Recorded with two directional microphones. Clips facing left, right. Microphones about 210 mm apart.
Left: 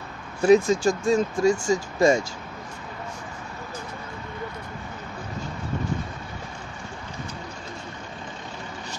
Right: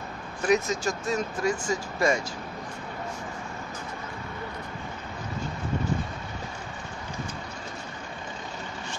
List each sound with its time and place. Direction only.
0.4 s speech: 30° left (ahead or behind)